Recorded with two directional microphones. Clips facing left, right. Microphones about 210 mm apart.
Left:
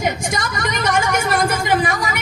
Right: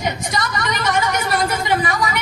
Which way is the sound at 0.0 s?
50° left (ahead or behind).